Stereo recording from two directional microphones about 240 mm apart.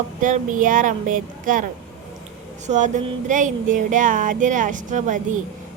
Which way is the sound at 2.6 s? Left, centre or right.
Right.